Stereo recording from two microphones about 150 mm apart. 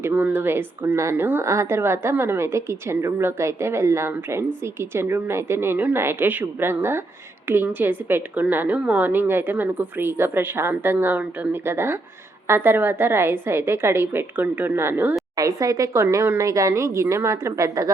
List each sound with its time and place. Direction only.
0.0 s a woman's voice: 10° right (ahead or behind)